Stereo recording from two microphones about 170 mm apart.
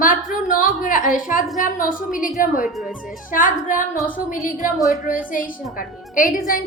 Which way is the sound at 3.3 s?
50° left (ahead or behind).